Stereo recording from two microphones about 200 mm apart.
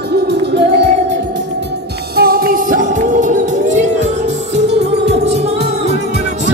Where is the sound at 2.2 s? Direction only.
50° right (ahead or behind).